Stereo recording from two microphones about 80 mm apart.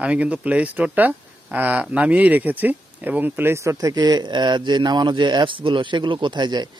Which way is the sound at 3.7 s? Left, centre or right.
Right.